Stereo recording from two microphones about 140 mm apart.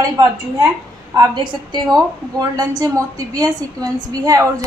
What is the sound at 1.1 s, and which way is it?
A woman's voice, 30° right (ahead or behind).